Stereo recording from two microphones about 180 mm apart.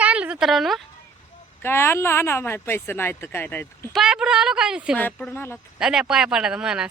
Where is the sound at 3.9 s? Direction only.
5° right (ahead or behind).